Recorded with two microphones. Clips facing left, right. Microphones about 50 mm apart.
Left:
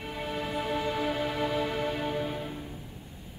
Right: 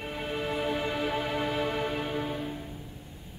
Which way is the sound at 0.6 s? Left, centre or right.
Right.